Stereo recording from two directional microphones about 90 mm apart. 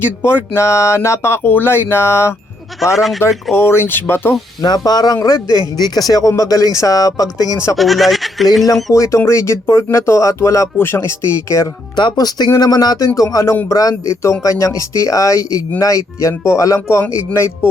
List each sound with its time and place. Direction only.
0.0 s speech: 25° left (ahead or behind)
2.9 s speech: centre (ahead or behind)
3.5 s speech: 25° left (ahead or behind)
4.6 s speech: 50° left (ahead or behind)
7.8 s speech: centre (ahead or behind)
8.9 s speech: 35° left (ahead or behind)
11.9 s speech: 50° left (ahead or behind); by 17.7 s 30° left (ahead or behind)